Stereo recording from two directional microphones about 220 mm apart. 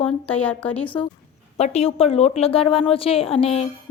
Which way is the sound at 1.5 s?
30° left (ahead or behind).